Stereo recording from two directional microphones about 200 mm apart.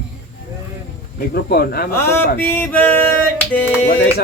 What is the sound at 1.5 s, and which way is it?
Speech, 50° left (ahead or behind).